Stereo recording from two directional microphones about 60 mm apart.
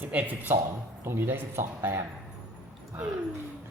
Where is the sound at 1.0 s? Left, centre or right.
Right.